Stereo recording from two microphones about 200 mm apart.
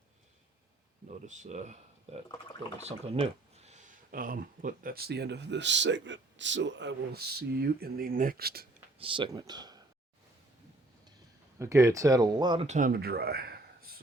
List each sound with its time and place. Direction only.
1.0 s speech: 35° right (ahead or behind)
9.0 s speech: 25° right (ahead or behind)
11.6 s speech: 15° right (ahead or behind)
12.6 s speech: 40° right (ahead or behind)